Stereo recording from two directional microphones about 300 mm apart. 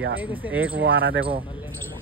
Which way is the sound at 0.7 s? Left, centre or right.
Right.